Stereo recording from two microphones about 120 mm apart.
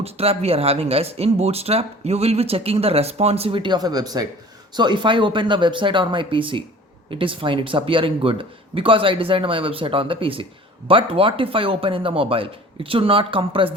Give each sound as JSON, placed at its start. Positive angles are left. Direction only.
{"t": 0.0, "sound": "speech", "side_deg": -55}